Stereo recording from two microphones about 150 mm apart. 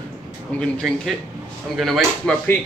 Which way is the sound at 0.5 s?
10° left (ahead or behind).